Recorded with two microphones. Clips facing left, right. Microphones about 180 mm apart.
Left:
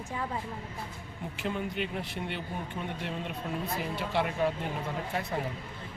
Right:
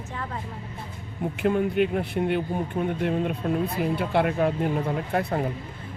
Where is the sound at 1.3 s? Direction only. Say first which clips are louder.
Right 11 dB; 55° right (ahead or behind).